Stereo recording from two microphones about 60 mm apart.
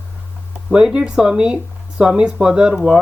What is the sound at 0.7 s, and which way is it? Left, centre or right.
Speech, centre.